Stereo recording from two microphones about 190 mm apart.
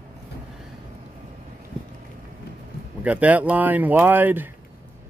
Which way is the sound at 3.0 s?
10° right (ahead or behind).